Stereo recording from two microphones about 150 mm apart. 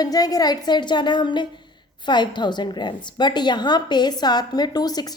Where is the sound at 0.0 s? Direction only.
25° left (ahead or behind).